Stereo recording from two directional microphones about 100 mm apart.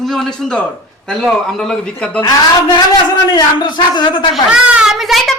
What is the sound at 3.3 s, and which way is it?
Speech, 50° left (ahead or behind).